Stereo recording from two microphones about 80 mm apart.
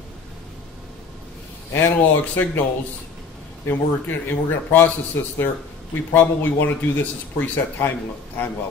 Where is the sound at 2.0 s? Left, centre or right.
Left.